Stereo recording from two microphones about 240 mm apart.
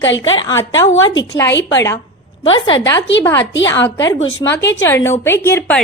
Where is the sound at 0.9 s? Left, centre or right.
Left.